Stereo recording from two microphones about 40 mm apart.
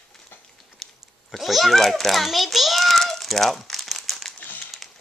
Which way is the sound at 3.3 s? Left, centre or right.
Centre.